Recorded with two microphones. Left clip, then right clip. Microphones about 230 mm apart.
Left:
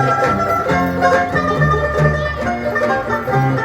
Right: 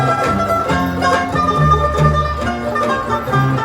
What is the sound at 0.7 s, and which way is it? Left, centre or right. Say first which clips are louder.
Music: left 2 dB; right.